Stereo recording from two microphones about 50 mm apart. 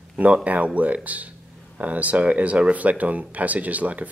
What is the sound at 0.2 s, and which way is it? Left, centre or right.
A man's voice, right.